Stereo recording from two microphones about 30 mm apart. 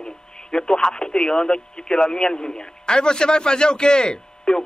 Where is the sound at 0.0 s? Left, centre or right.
Left.